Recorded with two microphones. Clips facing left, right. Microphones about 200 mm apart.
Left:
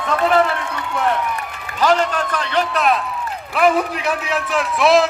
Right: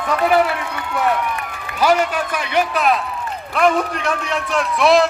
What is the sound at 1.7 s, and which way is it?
A man's voice, 10° right (ahead or behind).